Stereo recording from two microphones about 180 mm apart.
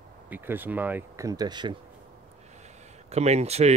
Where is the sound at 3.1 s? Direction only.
35° right (ahead or behind).